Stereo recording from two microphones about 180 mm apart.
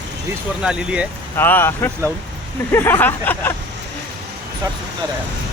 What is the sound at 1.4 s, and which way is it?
Speech, 10° left (ahead or behind).